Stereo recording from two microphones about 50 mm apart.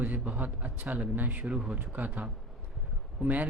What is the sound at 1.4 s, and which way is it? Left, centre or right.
Speech, centre.